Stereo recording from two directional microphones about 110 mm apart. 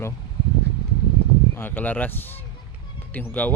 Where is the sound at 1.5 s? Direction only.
15° left (ahead or behind).